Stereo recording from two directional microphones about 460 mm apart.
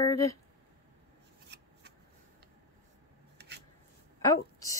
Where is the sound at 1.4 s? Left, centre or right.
Right.